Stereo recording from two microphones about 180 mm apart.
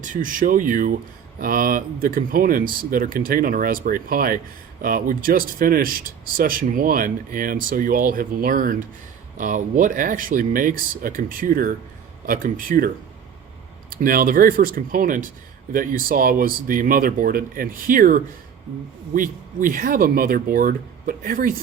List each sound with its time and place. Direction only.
0.0 s speech: 45° right (ahead or behind)
13.9 s speech: 50° right (ahead or behind)